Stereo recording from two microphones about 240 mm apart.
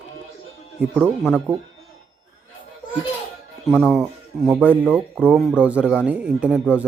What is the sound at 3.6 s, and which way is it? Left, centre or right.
Speech, centre.